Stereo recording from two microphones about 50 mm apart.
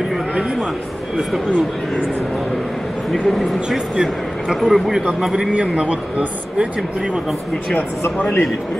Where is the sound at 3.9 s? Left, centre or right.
Centre.